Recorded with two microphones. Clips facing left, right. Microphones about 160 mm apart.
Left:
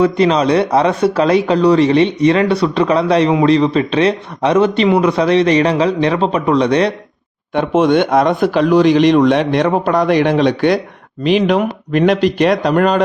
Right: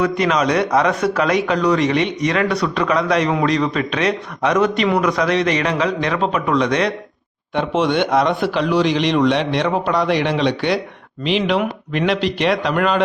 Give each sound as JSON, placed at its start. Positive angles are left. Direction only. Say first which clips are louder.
{"t": 0.0, "sound": "speech", "louder": "left 5 dB", "side_deg": 30}
{"t": 7.5, "sound": "a man's voice", "louder": "left 6 dB", "side_deg": 50}